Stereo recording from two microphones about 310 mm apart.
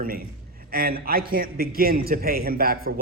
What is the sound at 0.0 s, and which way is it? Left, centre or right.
A man's voice, right.